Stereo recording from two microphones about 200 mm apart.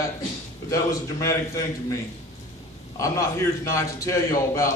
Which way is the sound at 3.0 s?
15° left (ahead or behind).